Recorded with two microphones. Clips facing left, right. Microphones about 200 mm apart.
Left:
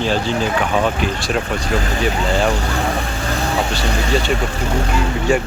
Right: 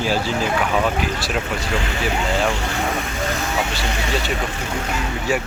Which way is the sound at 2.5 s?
35° left (ahead or behind).